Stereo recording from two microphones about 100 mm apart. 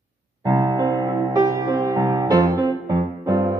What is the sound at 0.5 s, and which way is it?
Music, 40° right (ahead or behind).